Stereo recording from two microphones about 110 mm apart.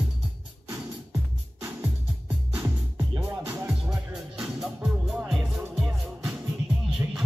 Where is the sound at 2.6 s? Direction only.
20° right (ahead or behind).